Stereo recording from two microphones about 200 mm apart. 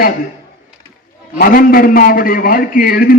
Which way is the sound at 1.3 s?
45° left (ahead or behind).